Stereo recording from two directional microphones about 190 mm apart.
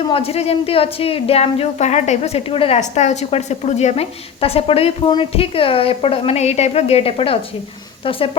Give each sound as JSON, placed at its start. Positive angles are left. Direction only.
{"t": 0.1, "sound": "a woman's voice", "side_deg": 30}